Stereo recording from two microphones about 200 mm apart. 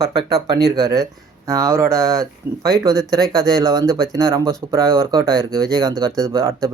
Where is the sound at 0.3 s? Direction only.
15° right (ahead or behind).